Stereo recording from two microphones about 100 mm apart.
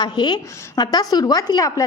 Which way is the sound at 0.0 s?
45° left (ahead or behind).